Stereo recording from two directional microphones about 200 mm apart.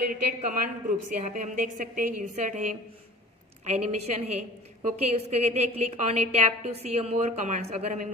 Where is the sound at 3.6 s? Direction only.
35° right (ahead or behind).